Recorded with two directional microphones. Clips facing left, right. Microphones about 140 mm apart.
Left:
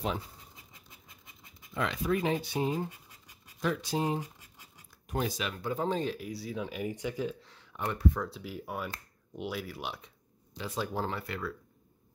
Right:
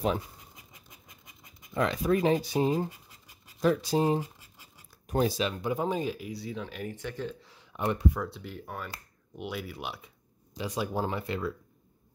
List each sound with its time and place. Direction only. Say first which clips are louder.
1.8 s speech: right 4 dB; 40° right (ahead or behind)
5.7 s speech: left 1 dB; 10° right (ahead or behind); by 7.3 s 10° left (ahead or behind)
7.4 s a sound: right 5 dB; 10° right (ahead or behind)
8.2 s speech: right 1 dB; centre (ahead or behind)
10.6 s speech: right 3 dB; 15° right (ahead or behind)